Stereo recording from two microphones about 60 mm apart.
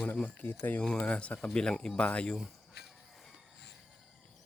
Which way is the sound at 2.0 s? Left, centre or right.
Left.